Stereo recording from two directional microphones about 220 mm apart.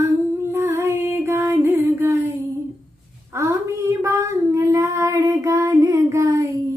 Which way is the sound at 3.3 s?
15° right (ahead or behind).